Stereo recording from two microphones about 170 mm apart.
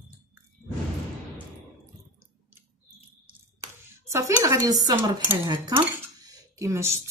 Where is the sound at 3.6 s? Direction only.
20° right (ahead or behind).